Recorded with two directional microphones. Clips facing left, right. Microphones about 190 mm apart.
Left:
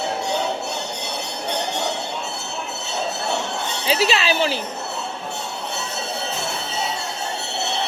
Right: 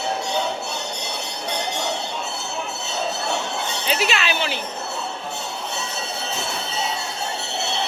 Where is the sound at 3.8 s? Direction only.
35° left (ahead or behind).